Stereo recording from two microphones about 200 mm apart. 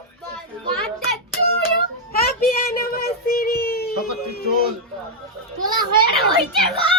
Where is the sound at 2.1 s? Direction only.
45° left (ahead or behind).